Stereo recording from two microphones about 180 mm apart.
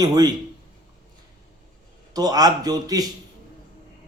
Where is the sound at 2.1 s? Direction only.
20° right (ahead or behind).